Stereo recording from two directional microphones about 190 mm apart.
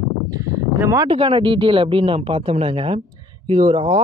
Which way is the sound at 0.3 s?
15° right (ahead or behind).